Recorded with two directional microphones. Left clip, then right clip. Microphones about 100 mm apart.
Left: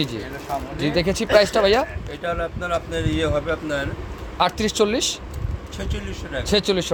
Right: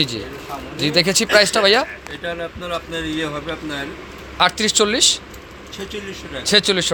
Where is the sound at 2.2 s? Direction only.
60° left (ahead or behind).